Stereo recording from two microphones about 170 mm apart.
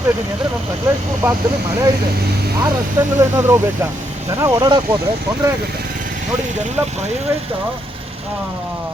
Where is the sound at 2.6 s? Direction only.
15° right (ahead or behind).